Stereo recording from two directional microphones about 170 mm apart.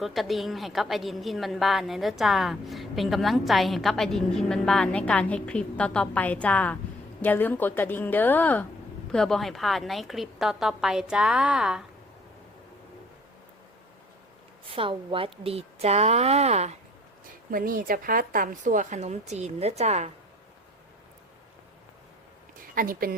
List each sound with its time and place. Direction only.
0.0 s a woman's voice: centre (ahead or behind)
14.7 s a woman's voice: 30° right (ahead or behind)
17.5 s a woman's voice: 55° right (ahead or behind); by 20.1 s 40° right (ahead or behind)
22.5 s a sound: 55° right (ahead or behind)